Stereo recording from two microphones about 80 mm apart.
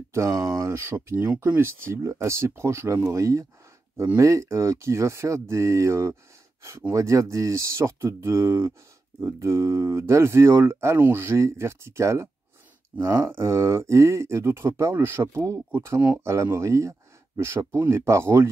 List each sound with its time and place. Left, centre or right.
0.1 s speech: right
1.9 s speech: right